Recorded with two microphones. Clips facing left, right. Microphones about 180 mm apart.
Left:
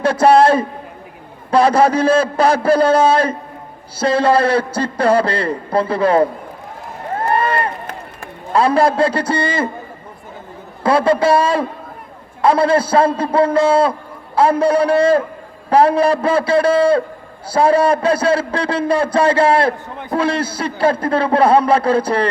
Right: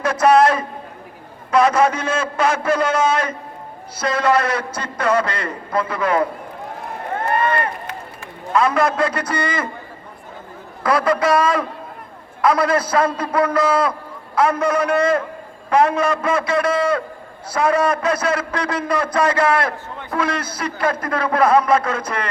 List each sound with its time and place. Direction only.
0.0 s a man's voice: 30° left (ahead or behind)
7.2 s run: 30° left (ahead or behind)
8.5 s a man's voice: 30° left (ahead or behind)
10.8 s a man's voice: 30° left (ahead or behind)